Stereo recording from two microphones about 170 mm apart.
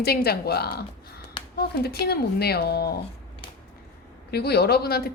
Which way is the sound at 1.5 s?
70° left (ahead or behind).